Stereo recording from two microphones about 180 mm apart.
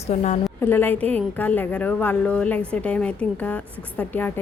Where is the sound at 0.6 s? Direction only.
10° left (ahead or behind).